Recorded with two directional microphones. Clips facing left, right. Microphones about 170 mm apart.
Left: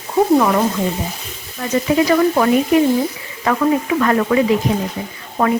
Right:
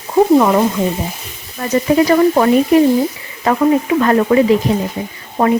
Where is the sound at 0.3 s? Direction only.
20° right (ahead or behind).